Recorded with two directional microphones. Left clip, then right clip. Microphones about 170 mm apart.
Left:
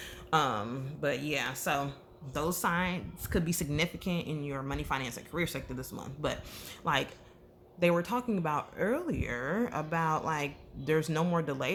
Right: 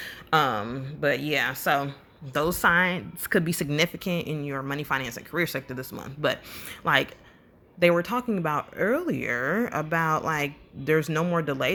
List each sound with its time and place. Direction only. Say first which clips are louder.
0.0 s speech: right 6 dB; 25° right (ahead or behind)